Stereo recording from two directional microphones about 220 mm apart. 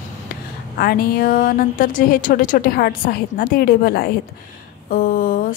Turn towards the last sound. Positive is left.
turn(degrees=40)  # may be behind; listen again after turning